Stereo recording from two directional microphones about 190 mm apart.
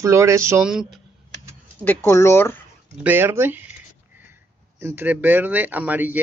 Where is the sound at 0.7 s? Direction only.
Centre (ahead or behind).